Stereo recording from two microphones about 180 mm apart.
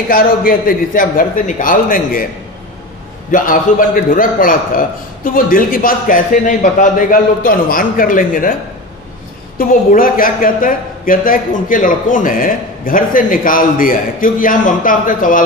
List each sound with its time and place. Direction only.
0.1 s a woman's voice: 50° left (ahead or behind)
3.3 s a woman's voice: 50° left (ahead or behind)
9.6 s a woman's voice: 50° left (ahead or behind)